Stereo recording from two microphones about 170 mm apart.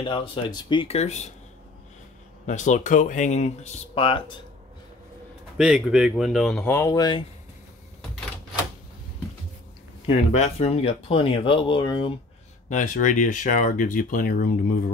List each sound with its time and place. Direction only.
0.0 s speech: 30° left (ahead or behind)
2.4 s speech: 45° left (ahead or behind)
5.6 s speech: 5° right (ahead or behind)
6.7 s speech: 15° left (ahead or behind)
10.0 s speech: 40° left (ahead or behind)
12.6 s speech: 50° left (ahead or behind)